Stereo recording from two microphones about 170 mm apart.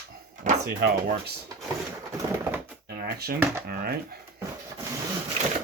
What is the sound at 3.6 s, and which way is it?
Speech, 65° right (ahead or behind).